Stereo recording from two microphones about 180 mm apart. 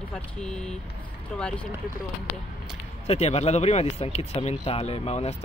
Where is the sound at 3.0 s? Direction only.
35° left (ahead or behind).